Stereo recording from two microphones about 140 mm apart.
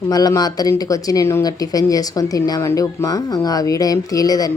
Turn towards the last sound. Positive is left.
turn(degrees=25)  # may be behind; listen again after turning